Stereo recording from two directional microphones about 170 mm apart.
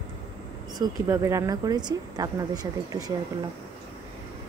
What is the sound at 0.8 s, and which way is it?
Speech, 15° right (ahead or behind).